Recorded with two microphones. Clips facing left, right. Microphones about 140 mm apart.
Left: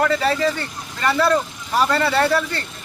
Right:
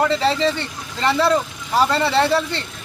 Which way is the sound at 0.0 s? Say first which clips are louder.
Right 1 dB; 25° right (ahead or behind).